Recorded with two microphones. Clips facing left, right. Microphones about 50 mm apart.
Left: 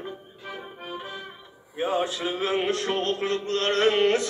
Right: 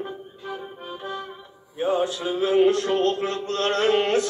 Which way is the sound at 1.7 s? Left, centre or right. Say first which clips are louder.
Right 3 dB; left.